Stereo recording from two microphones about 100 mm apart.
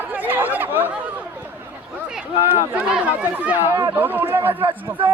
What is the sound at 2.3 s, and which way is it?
Speech, 70° left (ahead or behind).